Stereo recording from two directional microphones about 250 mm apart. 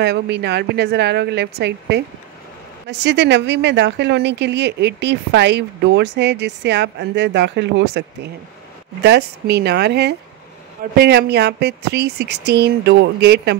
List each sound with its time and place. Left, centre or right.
0.0 s a woman's voice: right